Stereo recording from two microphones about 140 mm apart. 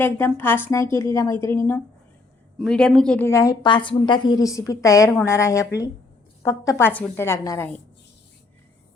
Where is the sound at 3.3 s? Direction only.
20° left (ahead or behind).